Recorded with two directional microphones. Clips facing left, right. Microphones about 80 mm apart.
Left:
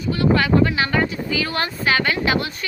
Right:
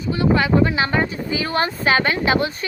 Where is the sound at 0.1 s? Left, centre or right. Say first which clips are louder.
Even; right.